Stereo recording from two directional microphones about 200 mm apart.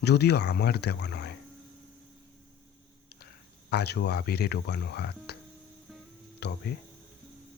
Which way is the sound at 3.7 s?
55° left (ahead or behind).